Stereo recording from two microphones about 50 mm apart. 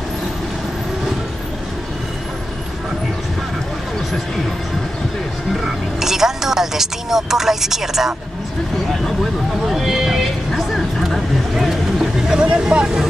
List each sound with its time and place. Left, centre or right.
5.5 s speech: centre
9.7 s vehicle: centre
12.4 s speech: centre